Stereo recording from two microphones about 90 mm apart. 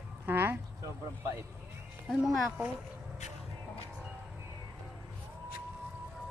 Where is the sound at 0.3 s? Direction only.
20° right (ahead or behind).